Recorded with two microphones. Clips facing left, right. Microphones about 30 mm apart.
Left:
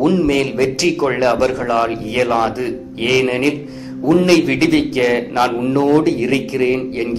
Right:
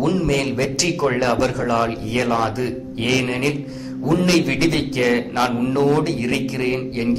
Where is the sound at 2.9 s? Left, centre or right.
Centre.